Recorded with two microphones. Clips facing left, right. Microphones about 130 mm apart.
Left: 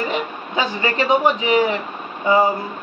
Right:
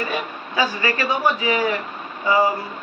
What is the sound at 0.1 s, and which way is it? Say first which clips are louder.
A man's voice: left 3 dB; 25° left (ahead or behind).